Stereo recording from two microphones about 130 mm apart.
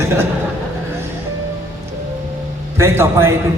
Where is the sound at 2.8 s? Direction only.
20° right (ahead or behind).